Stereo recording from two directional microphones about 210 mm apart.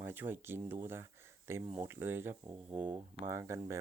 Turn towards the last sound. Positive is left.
turn(degrees=-15)  # may be behind; listen again after turning